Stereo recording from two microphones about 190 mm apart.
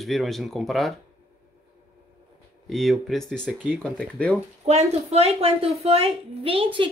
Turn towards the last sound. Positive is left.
turn(degrees=-30)  # may be behind; listen again after turning